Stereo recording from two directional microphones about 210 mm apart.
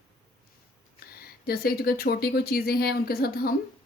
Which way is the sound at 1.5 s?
45° left (ahead or behind).